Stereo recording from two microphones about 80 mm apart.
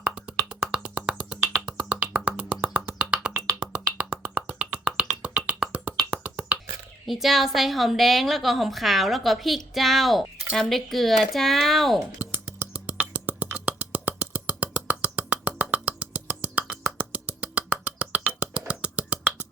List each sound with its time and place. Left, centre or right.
0.0 s music: centre
6.1 s finger snapping: centre
7.1 s a woman's voice: centre
12.7 s music: centre
17.0 s a sound: centre
18.7 s finger snapping: centre